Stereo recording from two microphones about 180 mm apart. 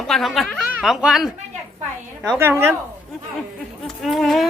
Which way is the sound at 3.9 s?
Centre (ahead or behind).